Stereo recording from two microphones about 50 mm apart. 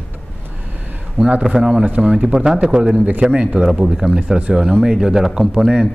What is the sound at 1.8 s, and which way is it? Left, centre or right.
Speech, centre.